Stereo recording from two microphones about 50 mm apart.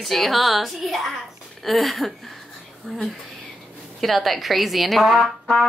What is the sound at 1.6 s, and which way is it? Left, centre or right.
Speech, centre.